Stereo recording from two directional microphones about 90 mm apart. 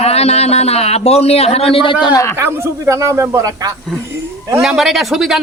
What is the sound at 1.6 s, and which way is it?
Speech, 80° left.